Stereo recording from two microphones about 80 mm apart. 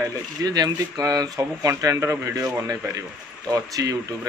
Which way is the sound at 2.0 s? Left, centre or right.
Right.